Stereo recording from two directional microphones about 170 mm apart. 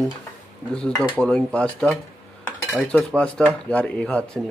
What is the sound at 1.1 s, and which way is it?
Cutlery, 5° left (ahead or behind).